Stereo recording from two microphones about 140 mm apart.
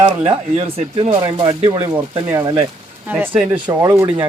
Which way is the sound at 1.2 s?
30° right (ahead or behind).